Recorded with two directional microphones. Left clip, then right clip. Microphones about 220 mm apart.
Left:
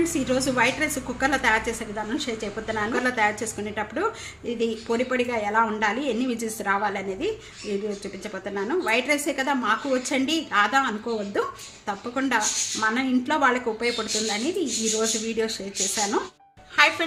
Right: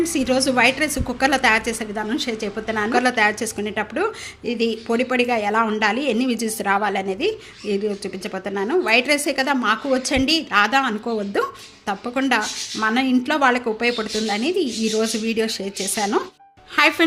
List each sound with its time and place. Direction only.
0.0 s a woman's voice: 35° right (ahead or behind)
16.7 s speech: 50° right (ahead or behind)